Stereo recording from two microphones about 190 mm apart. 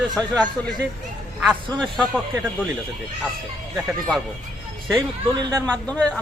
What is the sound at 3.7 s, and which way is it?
Speech, centre (ahead or behind).